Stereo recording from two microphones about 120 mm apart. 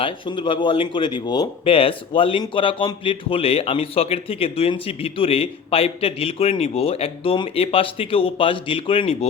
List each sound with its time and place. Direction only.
0.0 s speech: 45° left (ahead or behind)